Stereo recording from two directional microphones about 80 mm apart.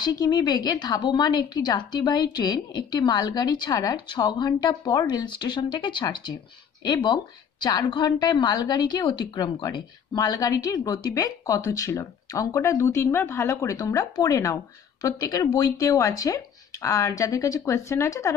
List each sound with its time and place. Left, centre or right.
0.0 s a woman's voice: left